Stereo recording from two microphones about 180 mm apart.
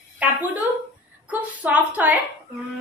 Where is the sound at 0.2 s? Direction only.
10° right (ahead or behind).